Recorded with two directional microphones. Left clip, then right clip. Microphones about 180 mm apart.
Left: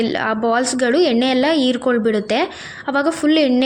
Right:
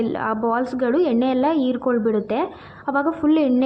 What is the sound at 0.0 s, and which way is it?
A woman's voice, 15° left (ahead or behind).